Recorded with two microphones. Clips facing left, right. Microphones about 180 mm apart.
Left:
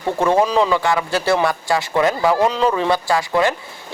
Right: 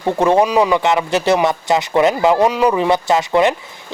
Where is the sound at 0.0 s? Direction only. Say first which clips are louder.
Right 3 dB; 15° right (ahead or behind).